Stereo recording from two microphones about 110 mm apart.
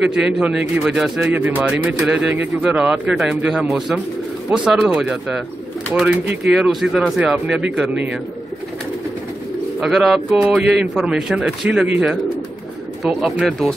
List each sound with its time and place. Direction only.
0.0 s a man's voice: 10° right (ahead or behind)
1.3 s a man's voice: 15° right (ahead or behind)
6.4 s speech: 5° right (ahead or behind)
9.8 s a man's voice: 5° right (ahead or behind)